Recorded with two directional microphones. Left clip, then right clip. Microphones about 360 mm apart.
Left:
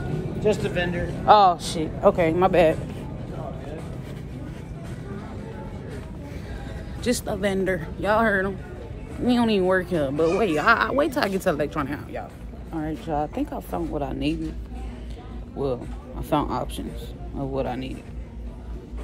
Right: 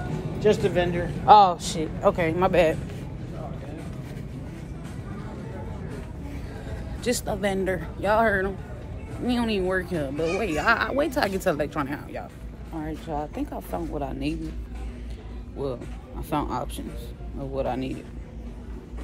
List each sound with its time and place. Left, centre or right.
0.4 s speech: right
1.2 s speech: centre
7.0 s speech: centre
15.6 s speech: centre